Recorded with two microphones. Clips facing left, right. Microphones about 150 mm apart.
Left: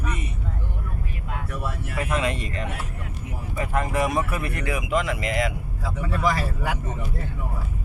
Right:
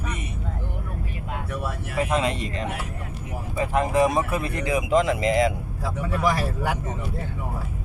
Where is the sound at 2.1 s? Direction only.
30° right (ahead or behind).